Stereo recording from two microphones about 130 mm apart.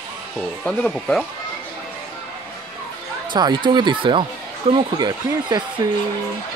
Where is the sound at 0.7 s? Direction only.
5° left (ahead or behind).